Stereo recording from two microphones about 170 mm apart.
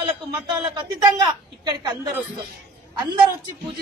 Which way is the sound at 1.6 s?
25° right (ahead or behind).